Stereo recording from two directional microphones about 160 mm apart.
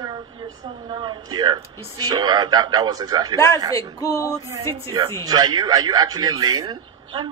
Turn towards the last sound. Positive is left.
turn(degrees=-25)  # may be behind; listen again after turning